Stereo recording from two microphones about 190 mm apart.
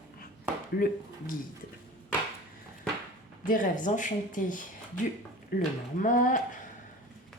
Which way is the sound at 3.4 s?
45° left (ahead or behind).